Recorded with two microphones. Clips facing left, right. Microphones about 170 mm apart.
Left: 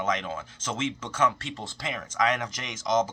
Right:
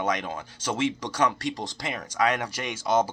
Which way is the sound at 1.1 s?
35° right (ahead or behind).